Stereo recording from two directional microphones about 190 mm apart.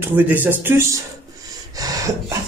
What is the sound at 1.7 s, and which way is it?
Snort, 15° right (ahead or behind).